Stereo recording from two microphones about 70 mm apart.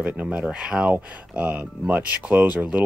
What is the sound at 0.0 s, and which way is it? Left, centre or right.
Speech, right.